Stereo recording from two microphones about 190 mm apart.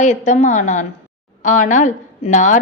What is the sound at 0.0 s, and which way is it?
A woman's voice, 40° left (ahead or behind).